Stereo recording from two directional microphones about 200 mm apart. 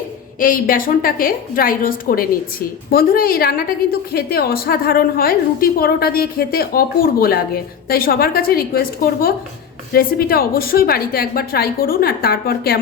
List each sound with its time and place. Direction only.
0.3 s a woman's voice: 45° left (ahead or behind)